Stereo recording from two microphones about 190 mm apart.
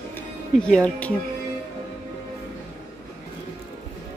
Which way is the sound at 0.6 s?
5° left (ahead or behind).